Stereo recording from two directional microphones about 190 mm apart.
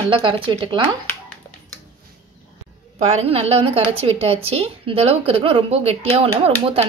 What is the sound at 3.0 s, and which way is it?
Speech, 35° right (ahead or behind).